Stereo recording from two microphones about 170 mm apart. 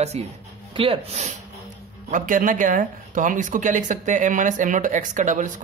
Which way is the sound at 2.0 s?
50° right (ahead or behind).